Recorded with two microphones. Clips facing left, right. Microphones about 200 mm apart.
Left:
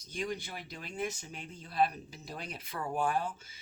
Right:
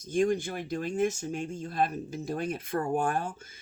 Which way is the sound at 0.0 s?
50° right (ahead or behind).